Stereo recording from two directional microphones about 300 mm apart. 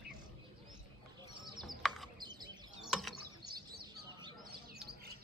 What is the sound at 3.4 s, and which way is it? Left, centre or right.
Fowl, right.